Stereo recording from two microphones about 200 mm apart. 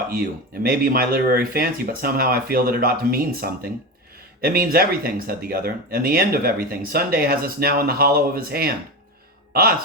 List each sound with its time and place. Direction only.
0.1 s speech: 50° right (ahead or behind)